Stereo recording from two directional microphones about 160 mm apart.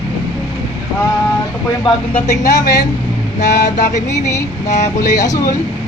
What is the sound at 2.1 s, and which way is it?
Speech, 20° left (ahead or behind).